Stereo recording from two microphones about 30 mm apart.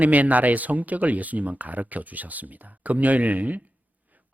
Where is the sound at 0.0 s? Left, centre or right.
Right.